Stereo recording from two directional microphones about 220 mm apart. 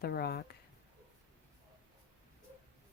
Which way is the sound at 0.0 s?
45° left (ahead or behind).